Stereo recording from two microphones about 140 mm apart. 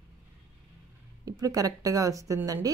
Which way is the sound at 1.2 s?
25° right (ahead or behind).